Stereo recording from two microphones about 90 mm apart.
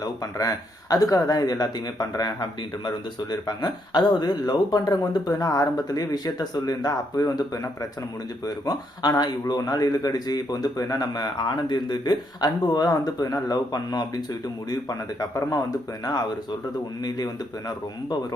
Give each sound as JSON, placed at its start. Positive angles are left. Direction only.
{"t": 0.0, "sound": "a man's voice", "side_deg": 40}